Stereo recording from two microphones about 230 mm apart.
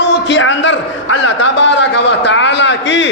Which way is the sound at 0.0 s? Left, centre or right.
Left.